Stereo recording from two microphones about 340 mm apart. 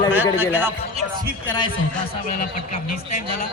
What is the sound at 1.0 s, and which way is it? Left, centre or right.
Music, right.